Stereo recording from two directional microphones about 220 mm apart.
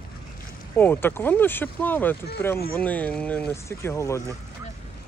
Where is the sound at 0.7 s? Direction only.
10° left (ahead or behind).